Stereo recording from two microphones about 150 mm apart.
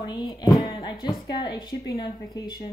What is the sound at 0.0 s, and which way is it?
A woman's voice, 30° left (ahead or behind).